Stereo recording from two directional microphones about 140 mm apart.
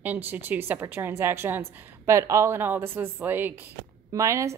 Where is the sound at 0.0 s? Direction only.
15° right (ahead or behind).